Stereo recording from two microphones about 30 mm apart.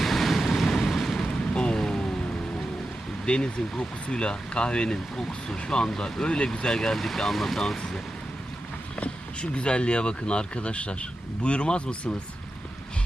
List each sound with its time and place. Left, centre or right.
0.0 s vehicle: centre
1.7 s a sound: left
3.2 s speech: left
9.0 s speech: left